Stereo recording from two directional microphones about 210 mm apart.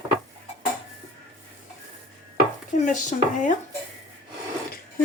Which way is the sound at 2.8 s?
35° left (ahead or behind).